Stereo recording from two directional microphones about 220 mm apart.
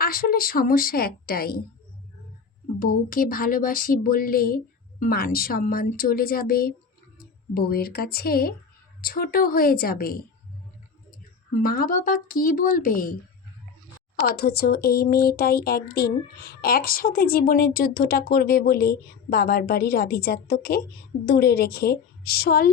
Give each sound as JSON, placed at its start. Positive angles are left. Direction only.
{"t": 0.0, "sound": "speech", "side_deg": 40}
{"t": 3.1, "sound": "speech", "side_deg": 40}
{"t": 11.6, "sound": "speech", "side_deg": 40}
{"t": 14.2, "sound": "speech", "side_deg": 45}